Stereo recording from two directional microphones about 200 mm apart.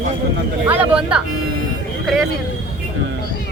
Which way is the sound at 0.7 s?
5° right (ahead or behind).